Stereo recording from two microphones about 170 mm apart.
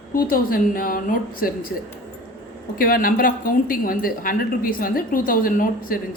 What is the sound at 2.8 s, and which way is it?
A woman's voice, 55° left (ahead or behind).